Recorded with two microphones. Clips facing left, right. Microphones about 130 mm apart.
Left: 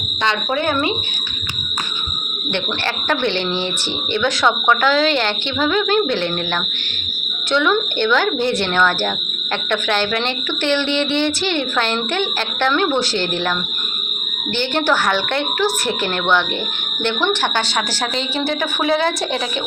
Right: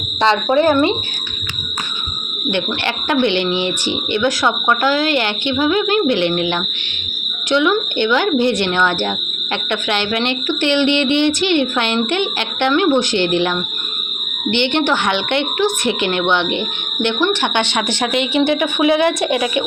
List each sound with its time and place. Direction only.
0.2 s a woman's voice: 30° right (ahead or behind)
2.5 s speech: 15° right (ahead or behind)
3.2 s speech: 60° right (ahead or behind)
3.6 s speech: 15° right (ahead or behind)
7.5 s speech: 15° right (ahead or behind)
8.2 s speech: 60° right (ahead or behind)
8.7 s speech: 20° right (ahead or behind)
10.6 s speech: 15° right (ahead or behind)
10.8 s speech: 60° right (ahead or behind)
11.2 s speech: 15° right (ahead or behind)
14.8 s a woman's voice: 20° right (ahead or behind)
18.6 s speech: 10° right (ahead or behind)